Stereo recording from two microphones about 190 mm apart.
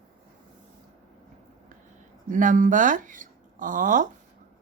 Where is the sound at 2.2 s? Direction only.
45° right (ahead or behind).